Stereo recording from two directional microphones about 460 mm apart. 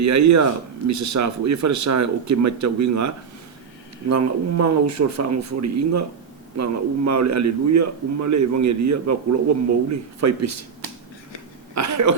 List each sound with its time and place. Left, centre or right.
0.0 s a man's voice: right
4.1 s a man's voice: right
11.7 s speech: right